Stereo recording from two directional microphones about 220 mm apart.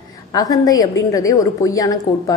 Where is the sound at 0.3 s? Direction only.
15° left (ahead or behind).